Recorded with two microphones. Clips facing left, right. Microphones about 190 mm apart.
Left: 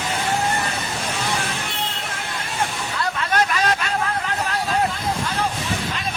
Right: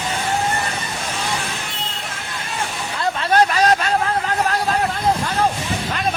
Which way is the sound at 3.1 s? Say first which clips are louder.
Right 6 dB; 35° right (ahead or behind).